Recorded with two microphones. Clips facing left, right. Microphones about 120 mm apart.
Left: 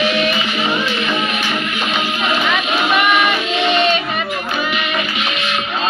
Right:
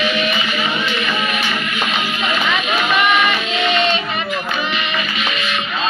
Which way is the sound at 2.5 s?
10° left (ahead or behind).